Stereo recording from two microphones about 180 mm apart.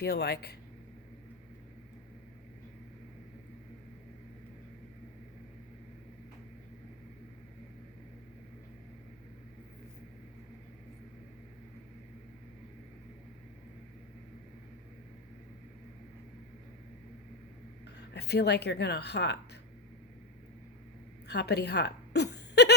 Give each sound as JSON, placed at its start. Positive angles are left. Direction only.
{"t": 0.0, "sound": "speech", "side_deg": 65}
{"t": 17.9, "sound": "speech", "side_deg": 70}
{"t": 21.2, "sound": "a woman's voice", "side_deg": 65}